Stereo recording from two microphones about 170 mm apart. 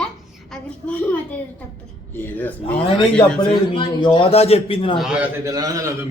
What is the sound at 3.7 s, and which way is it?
A man's voice, 30° left (ahead or behind).